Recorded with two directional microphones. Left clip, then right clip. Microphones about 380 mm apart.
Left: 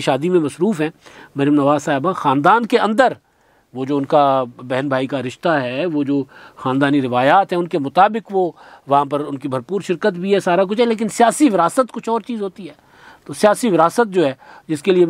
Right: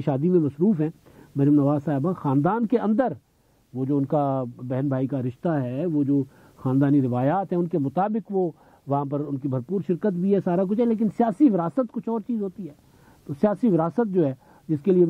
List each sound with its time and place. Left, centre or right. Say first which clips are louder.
0.0 s speech: left 7 dB; centre
8.4 s speech: left 6 dB; centre
8.9 s speech: left 10 dB; centre